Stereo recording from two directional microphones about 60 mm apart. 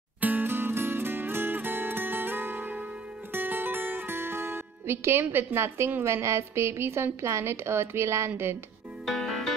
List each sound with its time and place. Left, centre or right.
0.2 s music: right
4.2 s speech: right
9.0 s music: centre